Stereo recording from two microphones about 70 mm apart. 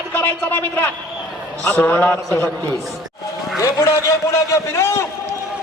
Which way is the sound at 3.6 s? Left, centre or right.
Left.